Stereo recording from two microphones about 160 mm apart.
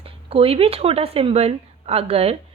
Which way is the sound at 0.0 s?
35° right (ahead or behind).